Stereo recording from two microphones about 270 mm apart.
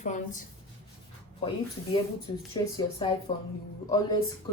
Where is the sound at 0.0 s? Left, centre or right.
Left.